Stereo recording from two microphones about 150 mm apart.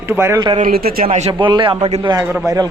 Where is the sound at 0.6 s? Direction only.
85° right.